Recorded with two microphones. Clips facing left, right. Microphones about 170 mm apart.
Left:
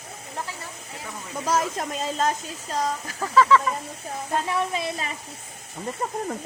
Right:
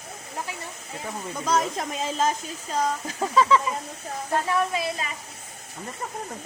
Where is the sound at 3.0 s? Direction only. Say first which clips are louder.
Left 3 dB; 20° right (ahead or behind).